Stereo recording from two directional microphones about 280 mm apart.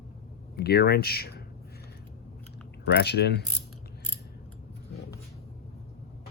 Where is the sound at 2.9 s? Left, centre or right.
Left.